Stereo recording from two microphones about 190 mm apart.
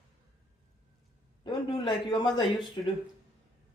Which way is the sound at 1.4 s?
25° left (ahead or behind).